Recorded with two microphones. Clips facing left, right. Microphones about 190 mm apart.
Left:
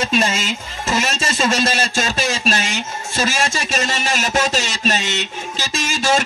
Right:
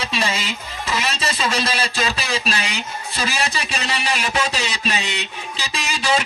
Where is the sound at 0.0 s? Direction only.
50° left (ahead or behind).